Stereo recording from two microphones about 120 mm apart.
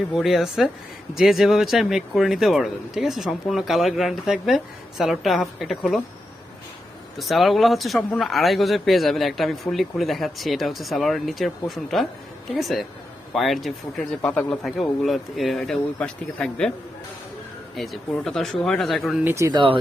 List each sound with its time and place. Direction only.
0.1 s speech: centre (ahead or behind)
7.2 s speech: centre (ahead or behind)
17.7 s speech: centre (ahead or behind)
19.2 s speech: 20° right (ahead or behind)
19.5 s speech: 45° right (ahead or behind)